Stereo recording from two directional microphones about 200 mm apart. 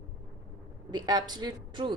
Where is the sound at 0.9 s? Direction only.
20° right (ahead or behind).